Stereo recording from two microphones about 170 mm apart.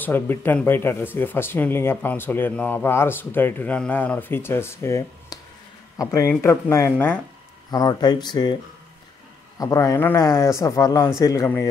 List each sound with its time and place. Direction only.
0.0 s speech: 10° left (ahead or behind)
9.6 s speech: 20° left (ahead or behind)